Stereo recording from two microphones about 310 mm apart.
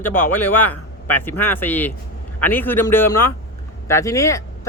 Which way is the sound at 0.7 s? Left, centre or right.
Left.